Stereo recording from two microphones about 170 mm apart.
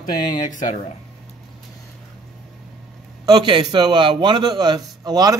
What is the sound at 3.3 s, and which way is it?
A man's voice, 25° right (ahead or behind).